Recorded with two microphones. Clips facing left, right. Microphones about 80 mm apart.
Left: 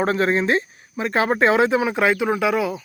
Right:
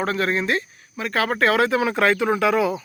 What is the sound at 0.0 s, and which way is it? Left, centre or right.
A man's voice, left.